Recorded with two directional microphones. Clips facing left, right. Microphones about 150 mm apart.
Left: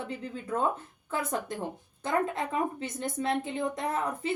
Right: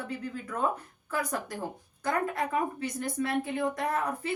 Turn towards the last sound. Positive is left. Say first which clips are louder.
# even
turn(degrees=20)  # may be behind; listen again after turning